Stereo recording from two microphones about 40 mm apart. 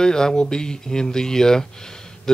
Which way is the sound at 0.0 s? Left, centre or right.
Centre.